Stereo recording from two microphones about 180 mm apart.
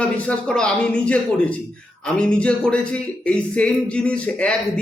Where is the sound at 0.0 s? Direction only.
5° left (ahead or behind).